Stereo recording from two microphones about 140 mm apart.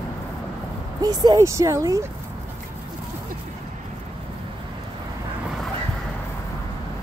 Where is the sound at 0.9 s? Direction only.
25° right (ahead or behind).